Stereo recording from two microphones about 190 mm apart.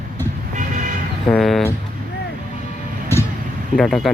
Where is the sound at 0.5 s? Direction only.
40° right (ahead or behind).